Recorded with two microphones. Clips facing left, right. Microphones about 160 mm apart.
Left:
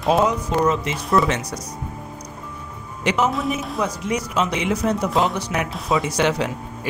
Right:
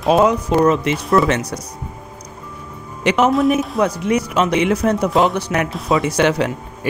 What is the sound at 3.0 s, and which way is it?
A woman's voice, 70° right (ahead or behind).